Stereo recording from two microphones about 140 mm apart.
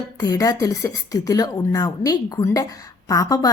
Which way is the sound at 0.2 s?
25° left (ahead or behind).